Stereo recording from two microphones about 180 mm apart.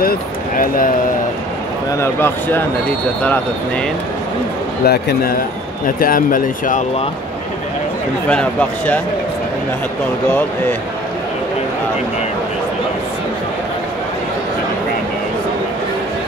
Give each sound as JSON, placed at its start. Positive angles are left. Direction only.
{"t": 0.0, "sound": "speech", "side_deg": 55}
{"t": 2.0, "sound": "speech", "side_deg": 10}
{"t": 4.8, "sound": "a man's voice", "side_deg": 65}
{"t": 5.9, "sound": "speech", "side_deg": 50}
{"t": 8.3, "sound": "speech", "side_deg": 5}